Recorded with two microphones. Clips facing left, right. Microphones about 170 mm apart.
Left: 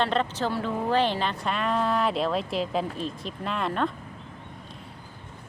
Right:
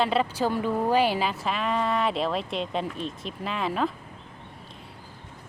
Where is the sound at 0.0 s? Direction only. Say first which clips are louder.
Right 1 dB; 5° right (ahead or behind).